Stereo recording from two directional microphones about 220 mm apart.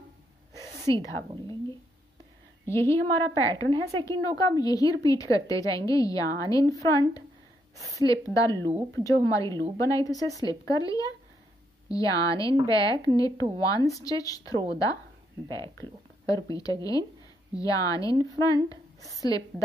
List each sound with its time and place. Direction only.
0.6 s a sound: 15° left (ahead or behind)
2.6 s a woman's voice: 10° left (ahead or behind)
15.8 s a woman's voice: 15° left (ahead or behind)